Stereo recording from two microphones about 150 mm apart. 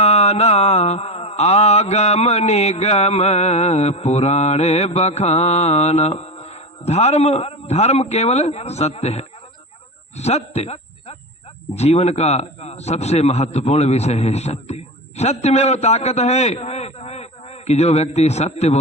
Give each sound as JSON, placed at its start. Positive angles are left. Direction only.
{"t": 0.0, "sound": "mantra", "side_deg": 45}
{"t": 10.2, "sound": "a man's voice", "side_deg": 45}